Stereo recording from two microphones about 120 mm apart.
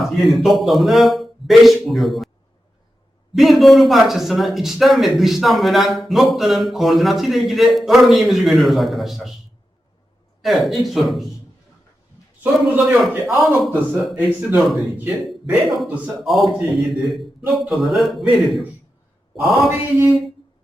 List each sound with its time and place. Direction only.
0.2 s a man's voice: centre (ahead or behind)
3.3 s a man's voice: centre (ahead or behind)
10.4 s a man's voice: centre (ahead or behind)
12.8 s a man's voice: centre (ahead or behind)
19.6 s mantra: 25° right (ahead or behind)